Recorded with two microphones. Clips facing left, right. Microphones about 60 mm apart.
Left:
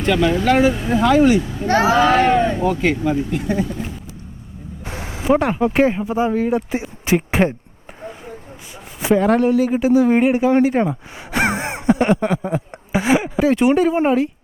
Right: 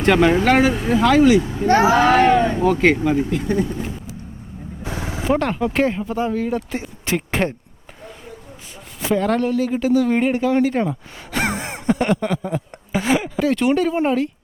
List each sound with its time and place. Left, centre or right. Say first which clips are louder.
0.0 s speech: right 2 dB; right
4.8 s vehicle: right 3 dB; left
5.2 s speech: left 4 dB; centre
6.7 s a sound: left 5 dB; centre
9.0 s speech: left 4 dB; centre